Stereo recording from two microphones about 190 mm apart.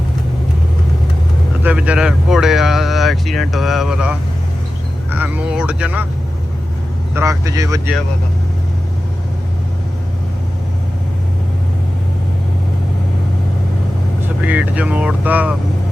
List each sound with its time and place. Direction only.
1.6 s speech: 5° right (ahead or behind)
7.1 s speech: 15° right (ahead or behind)
14.4 s speech: 10° right (ahead or behind)